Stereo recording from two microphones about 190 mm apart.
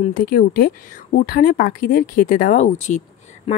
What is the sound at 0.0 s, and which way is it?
Speech, 45° left (ahead or behind).